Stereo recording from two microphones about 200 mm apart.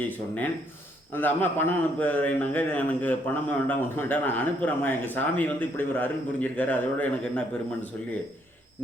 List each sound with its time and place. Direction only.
0.0 s a man's voice: 10° left (ahead or behind)